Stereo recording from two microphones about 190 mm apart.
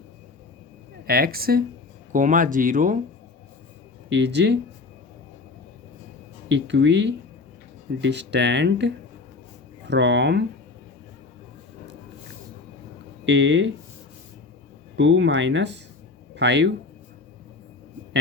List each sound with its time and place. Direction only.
1.0 s speech: 55° right (ahead or behind)
4.1 s speech: 65° right (ahead or behind)
6.5 s speech: 70° right (ahead or behind)
13.2 s speech: 70° right (ahead or behind)
14.9 s speech: 75° right (ahead or behind)